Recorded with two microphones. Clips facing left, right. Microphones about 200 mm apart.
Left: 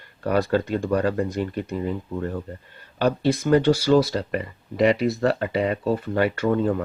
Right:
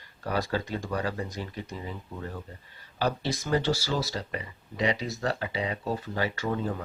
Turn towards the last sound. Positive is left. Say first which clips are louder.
# left 9 dB
turn(degrees=60)  # may be behind; listen again after turning